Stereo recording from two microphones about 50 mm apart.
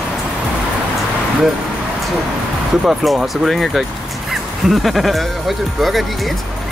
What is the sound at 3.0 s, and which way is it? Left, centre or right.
Speech, centre.